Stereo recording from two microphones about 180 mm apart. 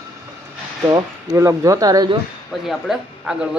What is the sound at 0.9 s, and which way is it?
Speech, 20° right (ahead or behind).